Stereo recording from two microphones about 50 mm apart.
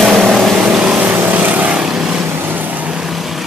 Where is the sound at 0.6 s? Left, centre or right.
Right.